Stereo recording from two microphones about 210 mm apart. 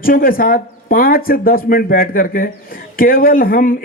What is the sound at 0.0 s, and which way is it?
Speech, 45° left (ahead or behind).